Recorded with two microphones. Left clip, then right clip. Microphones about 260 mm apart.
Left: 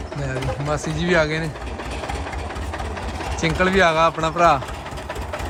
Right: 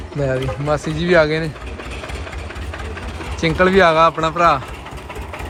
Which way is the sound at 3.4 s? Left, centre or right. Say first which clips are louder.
Right 4 dB; centre.